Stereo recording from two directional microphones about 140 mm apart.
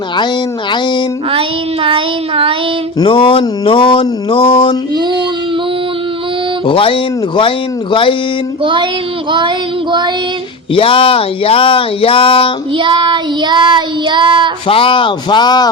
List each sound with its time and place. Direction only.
1.3 s child singing: 40° right (ahead or behind)
3.0 s speech: 40° left (ahead or behind)
6.7 s speech: 40° left (ahead or behind)
8.6 s child singing: 35° right (ahead or behind)
10.8 s speech: 40° left (ahead or behind)
12.7 s child singing: 35° right (ahead or behind)
14.7 s speech: 40° left (ahead or behind)